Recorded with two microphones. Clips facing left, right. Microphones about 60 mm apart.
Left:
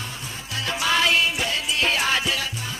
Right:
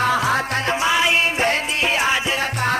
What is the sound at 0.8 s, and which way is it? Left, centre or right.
Music, centre.